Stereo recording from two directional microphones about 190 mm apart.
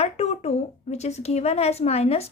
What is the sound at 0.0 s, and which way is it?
A woman's voice, 35° left (ahead or behind).